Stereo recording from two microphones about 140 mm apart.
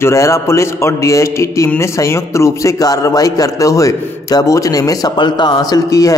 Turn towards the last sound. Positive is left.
turn(degrees=25)  # may be behind; listen again after turning